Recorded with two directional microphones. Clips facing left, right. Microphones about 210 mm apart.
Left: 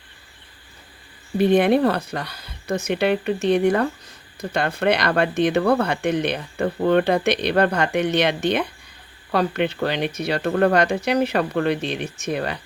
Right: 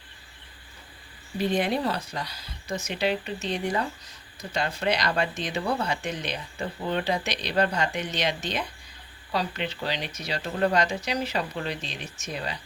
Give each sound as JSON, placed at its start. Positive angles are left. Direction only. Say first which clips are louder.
{"t": 1.4, "sound": "speech", "louder": "left 9 dB", "side_deg": 60}